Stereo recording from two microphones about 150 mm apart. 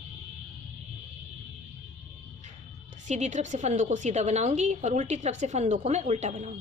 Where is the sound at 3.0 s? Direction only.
50° right (ahead or behind).